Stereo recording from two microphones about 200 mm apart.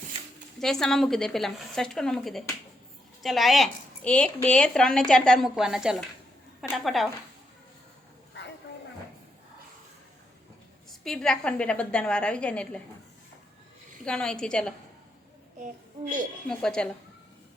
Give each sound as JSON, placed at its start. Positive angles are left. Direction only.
{"t": 0.6, "sound": "speech", "side_deg": 0}
{"t": 11.0, "sound": "speech", "side_deg": 5}
{"t": 14.0, "sound": "speech", "side_deg": 5}
{"t": 15.6, "sound": "a child's voice", "side_deg": -40}
{"t": 16.5, "sound": "speech", "side_deg": 5}